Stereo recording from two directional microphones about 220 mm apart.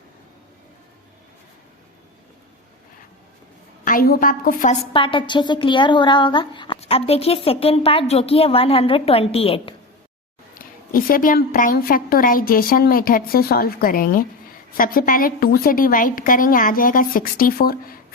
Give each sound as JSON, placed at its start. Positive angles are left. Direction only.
{"t": 3.8, "sound": "a woman's voice", "side_deg": 40}
{"t": 4.9, "sound": "speech", "side_deg": 20}
{"t": 10.6, "sound": "a woman's voice", "side_deg": 40}